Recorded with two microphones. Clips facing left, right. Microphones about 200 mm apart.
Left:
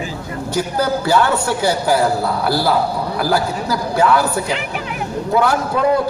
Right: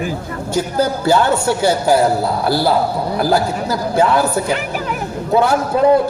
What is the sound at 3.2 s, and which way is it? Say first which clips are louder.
A woman's voice: right 2 dB; 25° right (ahead or behind).